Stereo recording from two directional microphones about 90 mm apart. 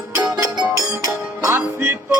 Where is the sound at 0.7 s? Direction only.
40° right (ahead or behind).